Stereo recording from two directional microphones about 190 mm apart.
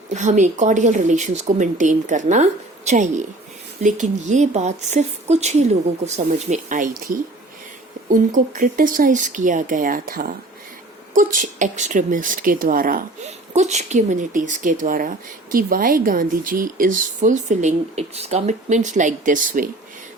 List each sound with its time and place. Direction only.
0.1 s a woman's voice: 40° right (ahead or behind)